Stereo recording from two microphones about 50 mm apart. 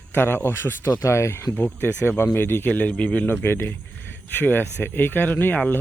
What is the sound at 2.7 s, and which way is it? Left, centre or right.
Speech, left.